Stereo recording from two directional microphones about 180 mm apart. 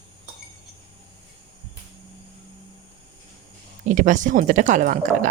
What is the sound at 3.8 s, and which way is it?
A woman's voice, 45° right (ahead or behind).